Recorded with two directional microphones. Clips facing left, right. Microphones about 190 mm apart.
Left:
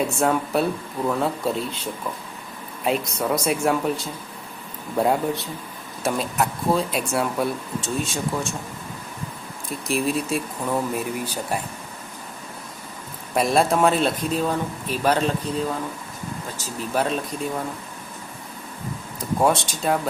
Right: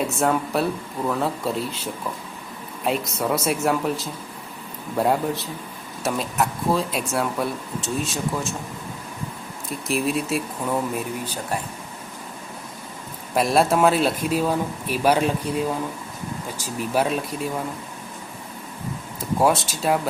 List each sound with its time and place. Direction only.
0.1 s speech: centre (ahead or behind)
9.6 s speech: centre (ahead or behind)
13.3 s speech: centre (ahead or behind)
19.4 s speech: 5° right (ahead or behind)